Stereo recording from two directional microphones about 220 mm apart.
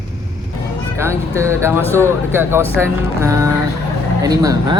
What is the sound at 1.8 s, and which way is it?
Speech, 10° left (ahead or behind).